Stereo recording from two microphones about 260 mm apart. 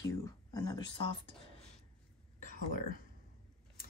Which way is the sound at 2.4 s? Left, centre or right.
Left.